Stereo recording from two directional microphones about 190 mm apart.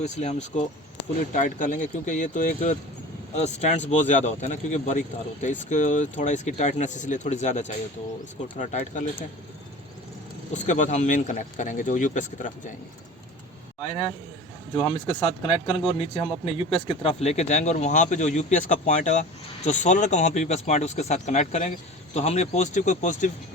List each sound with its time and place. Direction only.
0.0 s speech: 35° left (ahead or behind)
10.5 s speech: 40° left (ahead or behind)
14.8 s speech: 30° left (ahead or behind)